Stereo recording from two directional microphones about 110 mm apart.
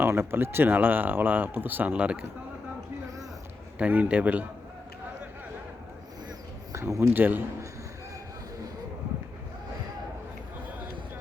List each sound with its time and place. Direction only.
0.0 s speech: 20° right (ahead or behind)
3.8 s speech: 15° right (ahead or behind)
6.7 s a man's voice: 25° right (ahead or behind)
7.1 s speech: 15° right (ahead or behind)